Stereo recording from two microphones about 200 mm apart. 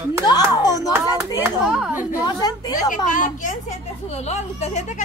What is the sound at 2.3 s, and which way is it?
Speech, 20° left (ahead or behind).